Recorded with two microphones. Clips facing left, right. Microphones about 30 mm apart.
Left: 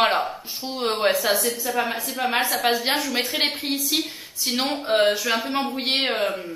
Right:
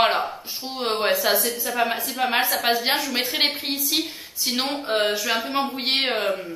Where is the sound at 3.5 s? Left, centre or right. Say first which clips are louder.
Even; centre.